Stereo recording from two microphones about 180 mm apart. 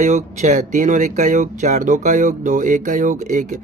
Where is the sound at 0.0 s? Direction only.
40° right (ahead or behind).